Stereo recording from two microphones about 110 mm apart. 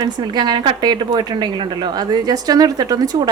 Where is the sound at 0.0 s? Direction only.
40° right (ahead or behind).